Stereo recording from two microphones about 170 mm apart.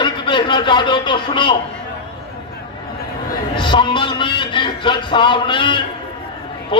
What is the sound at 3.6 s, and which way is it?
A man's voice, 30° left (ahead or behind).